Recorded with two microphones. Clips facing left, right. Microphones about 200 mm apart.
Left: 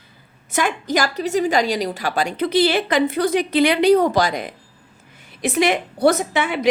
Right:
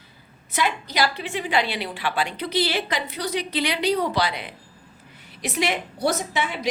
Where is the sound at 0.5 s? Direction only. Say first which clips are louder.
Left 5 dB; 50° left (ahead or behind).